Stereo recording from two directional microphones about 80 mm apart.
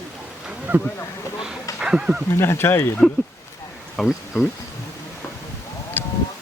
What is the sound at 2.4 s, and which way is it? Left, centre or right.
Speech, left.